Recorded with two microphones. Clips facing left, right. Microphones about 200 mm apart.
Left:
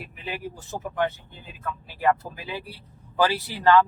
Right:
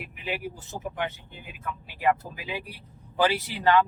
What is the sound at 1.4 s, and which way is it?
Speech, 15° right (ahead or behind).